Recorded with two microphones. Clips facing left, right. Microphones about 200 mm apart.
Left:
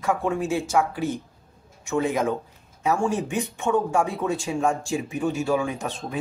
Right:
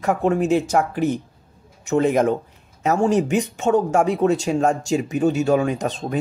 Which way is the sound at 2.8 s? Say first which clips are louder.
Right 5 dB; 75° right (ahead or behind).